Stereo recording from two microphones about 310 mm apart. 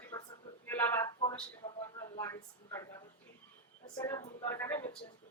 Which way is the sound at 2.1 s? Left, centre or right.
Centre.